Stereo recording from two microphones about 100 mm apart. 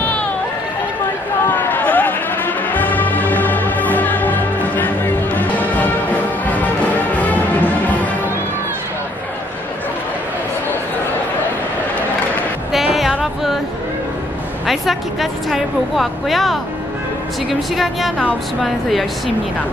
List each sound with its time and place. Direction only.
0.0 s music: 15° left (ahead or behind)
1.5 s music: 15° left (ahead or behind)
12.9 s music: centre (ahead or behind)
14.7 s a woman's voice: centre (ahead or behind)